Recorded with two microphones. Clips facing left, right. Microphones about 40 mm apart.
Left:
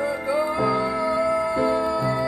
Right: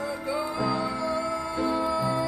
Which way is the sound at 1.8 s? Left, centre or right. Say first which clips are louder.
Left 3 dB; centre.